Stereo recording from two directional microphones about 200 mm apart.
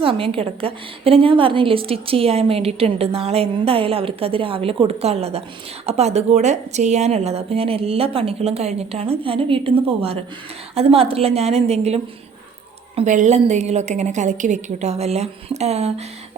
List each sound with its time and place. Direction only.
0.0 s a woman's voice: 25° right (ahead or behind)
13.0 s a woman's voice: 35° right (ahead or behind)